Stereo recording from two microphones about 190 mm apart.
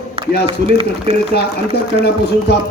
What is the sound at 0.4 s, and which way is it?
Speech, 30° right (ahead or behind).